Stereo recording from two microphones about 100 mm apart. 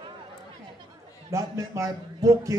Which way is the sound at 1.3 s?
30° right (ahead or behind).